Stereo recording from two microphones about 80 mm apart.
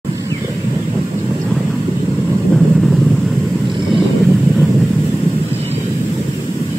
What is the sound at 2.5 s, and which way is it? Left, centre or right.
Vehicle, centre.